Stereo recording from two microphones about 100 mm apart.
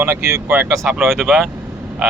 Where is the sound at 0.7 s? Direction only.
5° right (ahead or behind).